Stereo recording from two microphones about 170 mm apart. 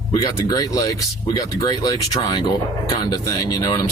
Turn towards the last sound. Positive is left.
turn(degrees=20)  # may be behind; listen again after turning